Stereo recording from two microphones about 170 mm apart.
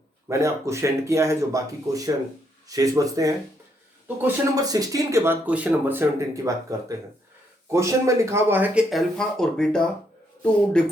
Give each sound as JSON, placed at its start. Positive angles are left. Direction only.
{"t": 0.3, "sound": "speech", "side_deg": -15}